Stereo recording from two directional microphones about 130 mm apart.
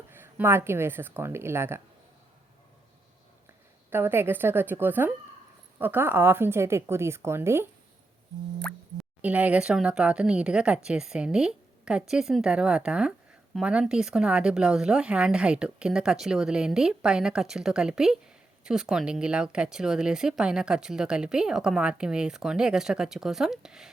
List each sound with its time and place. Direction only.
0.1 s a woman's voice: 15° right (ahead or behind)
3.8 s a woman's voice: 15° right (ahead or behind)
9.2 s a woman's voice: 10° right (ahead or behind)